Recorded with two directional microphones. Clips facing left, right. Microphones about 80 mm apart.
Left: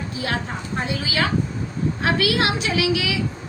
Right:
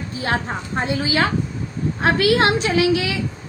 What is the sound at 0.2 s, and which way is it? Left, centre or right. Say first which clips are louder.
A woman's voice: right 4 dB; right.